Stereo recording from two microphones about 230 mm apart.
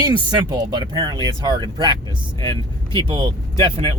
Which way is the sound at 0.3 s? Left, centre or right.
Centre.